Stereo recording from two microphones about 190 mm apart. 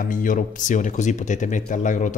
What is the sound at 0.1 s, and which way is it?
Speech, 45° left (ahead or behind).